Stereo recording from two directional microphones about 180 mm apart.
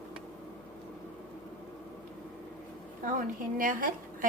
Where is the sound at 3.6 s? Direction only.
50° right (ahead or behind).